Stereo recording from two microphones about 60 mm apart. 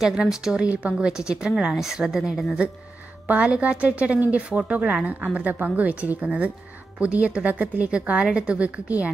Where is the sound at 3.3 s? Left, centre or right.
Right.